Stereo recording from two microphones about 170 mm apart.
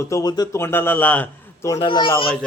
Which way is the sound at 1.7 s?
25° left (ahead or behind).